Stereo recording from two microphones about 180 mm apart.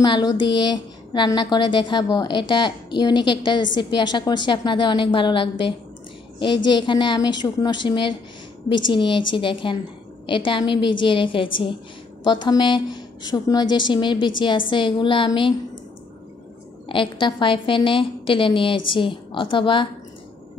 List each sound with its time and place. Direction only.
0.0 s a woman's voice: 25° left (ahead or behind)
16.9 s a woman's voice: 25° left (ahead or behind)